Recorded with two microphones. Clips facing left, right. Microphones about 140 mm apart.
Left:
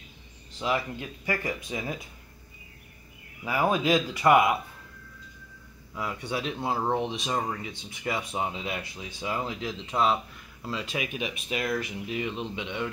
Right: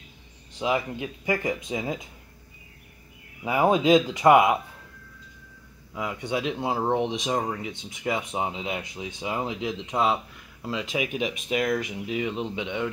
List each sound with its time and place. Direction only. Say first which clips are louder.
0.5 s speech: right 3 dB; 15° right (ahead or behind)
3.4 s speech: right 5 dB; 20° right (ahead or behind)
5.9 s speech: right 3 dB; 15° right (ahead or behind)